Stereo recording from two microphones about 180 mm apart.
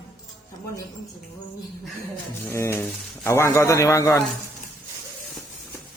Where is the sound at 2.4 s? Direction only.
15° left (ahead or behind).